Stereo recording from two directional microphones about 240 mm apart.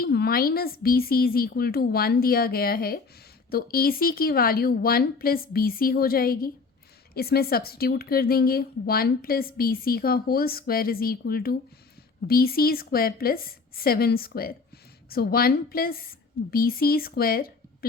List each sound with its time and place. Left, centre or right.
0.0 s a woman's voice: left